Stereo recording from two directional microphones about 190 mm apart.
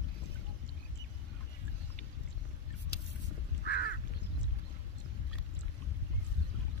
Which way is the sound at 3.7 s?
55° left (ahead or behind).